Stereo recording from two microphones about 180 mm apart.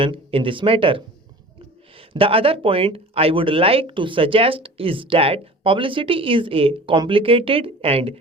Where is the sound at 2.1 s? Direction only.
30° right (ahead or behind).